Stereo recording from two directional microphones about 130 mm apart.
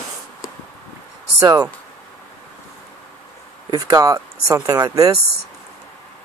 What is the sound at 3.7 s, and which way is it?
Speech, 25° right (ahead or behind).